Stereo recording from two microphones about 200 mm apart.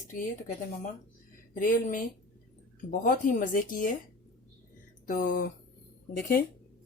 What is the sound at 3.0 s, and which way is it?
Speech, 40° left (ahead or behind).